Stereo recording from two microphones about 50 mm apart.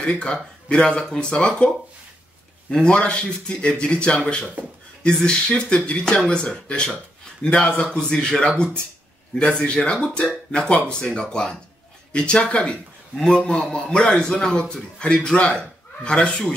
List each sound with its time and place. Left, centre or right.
0.0 s speech: left
2.7 s a man's voice: centre
7.7 s a man's voice: left